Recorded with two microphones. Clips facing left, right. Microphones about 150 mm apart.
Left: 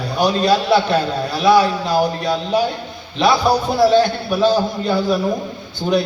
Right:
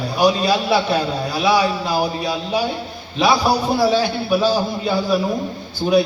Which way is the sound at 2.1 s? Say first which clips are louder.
Left 3 dB; 10° right (ahead or behind).